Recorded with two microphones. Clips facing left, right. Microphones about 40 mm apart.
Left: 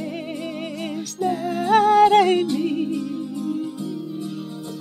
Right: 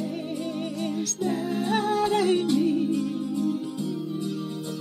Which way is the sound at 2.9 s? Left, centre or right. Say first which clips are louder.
Even; centre.